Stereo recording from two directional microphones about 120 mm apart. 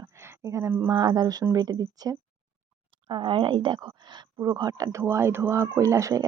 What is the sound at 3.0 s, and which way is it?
Speech, 45° right (ahead or behind).